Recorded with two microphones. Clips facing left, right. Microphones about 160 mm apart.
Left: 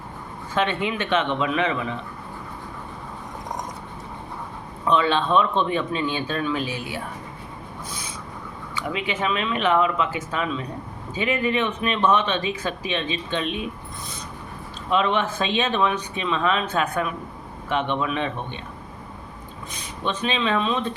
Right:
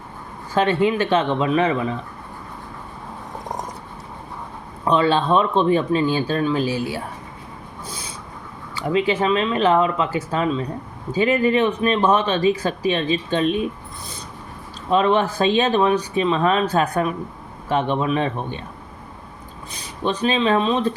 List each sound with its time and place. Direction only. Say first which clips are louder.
0.5 s speech: right 6 dB; 35° right (ahead or behind)
4.9 s speech: right 3 dB; 35° right (ahead or behind)
7.9 s a sound: right 3 dB; 30° right (ahead or behind)
8.7 s speech: right 8 dB; 35° right (ahead or behind)
14.8 s speech: right 4 dB; 40° right (ahead or behind)
19.7 s speech: right 4 dB; 35° right (ahead or behind)